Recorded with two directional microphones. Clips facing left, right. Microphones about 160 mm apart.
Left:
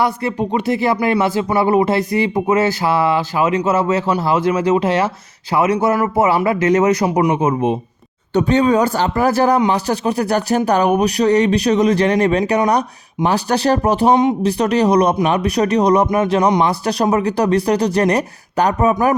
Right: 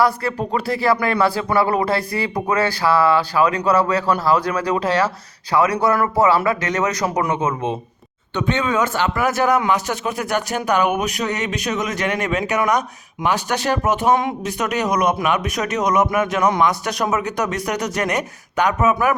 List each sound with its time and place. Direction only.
0.0 s speech: 20° left (ahead or behind)
8.3 s speech: 40° left (ahead or behind)
14.1 s speech: 20° left (ahead or behind)
14.4 s speech: 35° left (ahead or behind)